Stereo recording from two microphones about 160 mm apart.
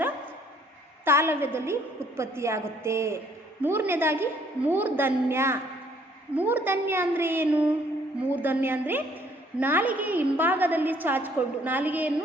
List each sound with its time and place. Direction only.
1.0 s a woman's voice: 15° right (ahead or behind)